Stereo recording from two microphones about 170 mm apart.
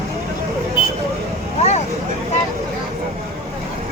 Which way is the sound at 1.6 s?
40° left (ahead or behind).